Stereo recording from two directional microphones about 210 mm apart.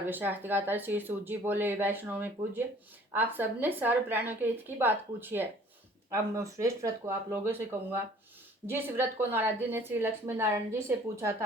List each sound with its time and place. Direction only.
0.1 s a woman's voice: 10° right (ahead or behind)